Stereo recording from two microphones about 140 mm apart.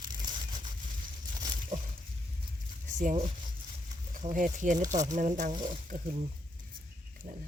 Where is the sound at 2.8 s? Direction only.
65° right (ahead or behind).